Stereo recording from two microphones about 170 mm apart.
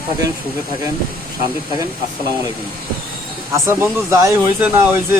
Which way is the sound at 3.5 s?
15° right (ahead or behind).